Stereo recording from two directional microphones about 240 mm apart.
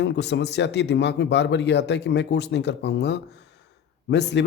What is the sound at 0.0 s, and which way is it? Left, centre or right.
Speech, left.